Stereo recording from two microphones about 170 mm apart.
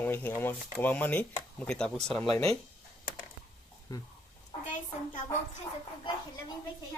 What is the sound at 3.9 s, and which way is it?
Speech, 20° left (ahead or behind).